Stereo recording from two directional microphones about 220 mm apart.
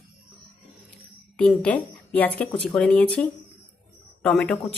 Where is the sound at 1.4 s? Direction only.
5° left (ahead or behind).